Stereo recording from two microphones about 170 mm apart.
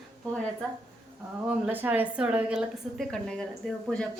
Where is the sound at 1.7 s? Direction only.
10° right (ahead or behind).